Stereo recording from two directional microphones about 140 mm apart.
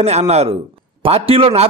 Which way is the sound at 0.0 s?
50° right (ahead or behind).